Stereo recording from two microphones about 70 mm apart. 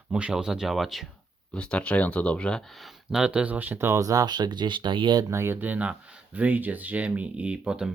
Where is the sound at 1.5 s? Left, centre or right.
Centre.